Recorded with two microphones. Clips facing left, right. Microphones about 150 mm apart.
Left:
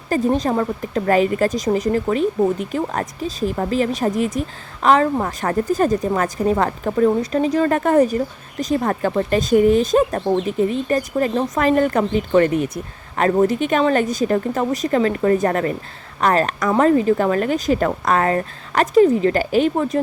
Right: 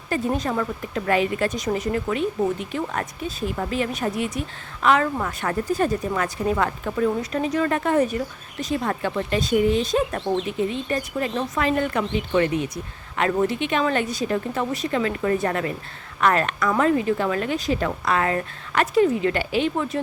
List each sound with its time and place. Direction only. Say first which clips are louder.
0.1 s speech: left 6 dB; 35° left (ahead or behind)